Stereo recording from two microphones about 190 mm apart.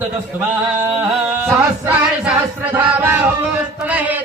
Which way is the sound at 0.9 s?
10° right (ahead or behind).